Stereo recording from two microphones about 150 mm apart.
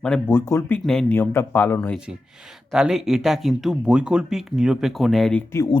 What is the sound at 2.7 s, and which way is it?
Speech, 5° right (ahead or behind).